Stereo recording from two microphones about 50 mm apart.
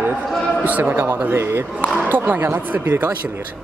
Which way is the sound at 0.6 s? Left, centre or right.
Right.